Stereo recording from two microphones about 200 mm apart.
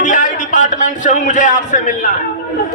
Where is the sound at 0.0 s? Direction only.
40° left (ahead or behind).